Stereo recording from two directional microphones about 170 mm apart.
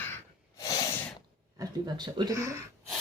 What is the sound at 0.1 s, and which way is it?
Snort, 20° left (ahead or behind).